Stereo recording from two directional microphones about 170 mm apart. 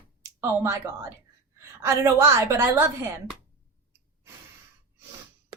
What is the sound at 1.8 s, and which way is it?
Speech, 15° right (ahead or behind).